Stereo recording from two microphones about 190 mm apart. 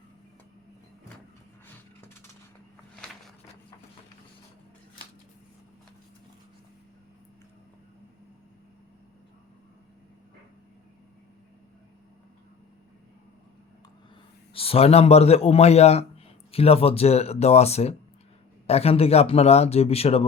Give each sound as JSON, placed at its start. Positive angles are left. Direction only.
{"t": 14.5, "sound": "a man's voice", "side_deg": 30}